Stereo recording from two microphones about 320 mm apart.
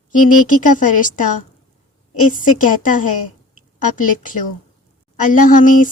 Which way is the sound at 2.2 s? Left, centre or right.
Left.